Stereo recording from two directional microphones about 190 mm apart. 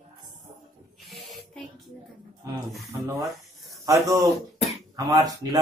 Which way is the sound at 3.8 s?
15° right (ahead or behind).